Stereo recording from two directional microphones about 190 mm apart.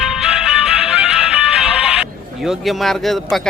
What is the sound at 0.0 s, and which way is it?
Music, 5° right (ahead or behind).